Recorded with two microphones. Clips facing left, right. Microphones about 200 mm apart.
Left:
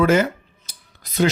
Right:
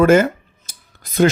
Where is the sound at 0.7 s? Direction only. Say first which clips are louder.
Right 3 dB; 50° right (ahead or behind).